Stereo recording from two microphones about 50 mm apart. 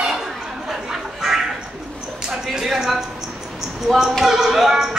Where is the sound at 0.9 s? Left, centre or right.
Centre.